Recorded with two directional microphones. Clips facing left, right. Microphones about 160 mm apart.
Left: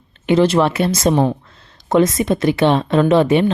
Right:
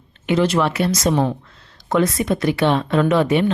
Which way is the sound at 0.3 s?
30° left (ahead or behind).